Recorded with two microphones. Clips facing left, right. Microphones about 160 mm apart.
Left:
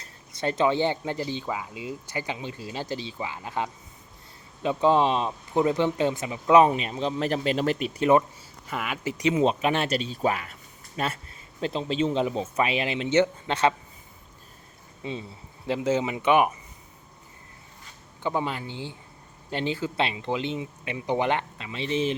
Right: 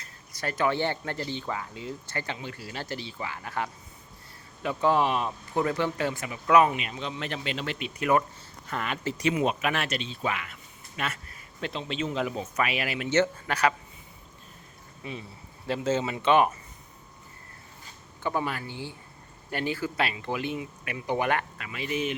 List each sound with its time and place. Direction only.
0.0 s speech: 25° left (ahead or behind); by 8.0 s 40° left (ahead or behind)
8.6 s speech: 5° left (ahead or behind); by 13.7 s 25° left (ahead or behind)
15.0 s speech: 25° left (ahead or behind)
18.2 s speech: 20° left (ahead or behind)